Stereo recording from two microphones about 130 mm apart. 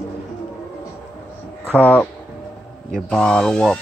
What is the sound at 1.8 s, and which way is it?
Speech, 10° left (ahead or behind).